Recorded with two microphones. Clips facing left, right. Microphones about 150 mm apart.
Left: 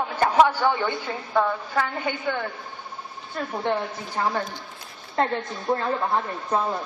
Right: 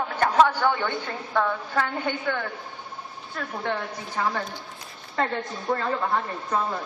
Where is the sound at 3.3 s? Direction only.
25° left (ahead or behind).